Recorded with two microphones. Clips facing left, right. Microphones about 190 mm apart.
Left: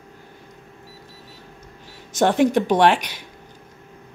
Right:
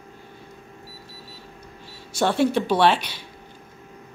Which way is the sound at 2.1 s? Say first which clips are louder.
Left 3 dB; 15° left (ahead or behind).